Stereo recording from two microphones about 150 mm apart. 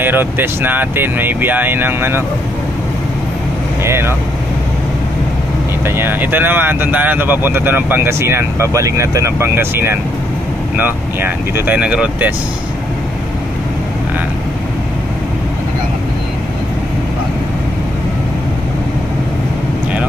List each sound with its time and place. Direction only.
0.0 s speech: 15° right (ahead or behind)
3.8 s speech: 15° right (ahead or behind)
5.9 s speech: 15° right (ahead or behind)